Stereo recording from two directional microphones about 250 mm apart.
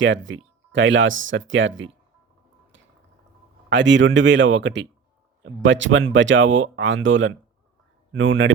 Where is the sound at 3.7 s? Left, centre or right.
Right.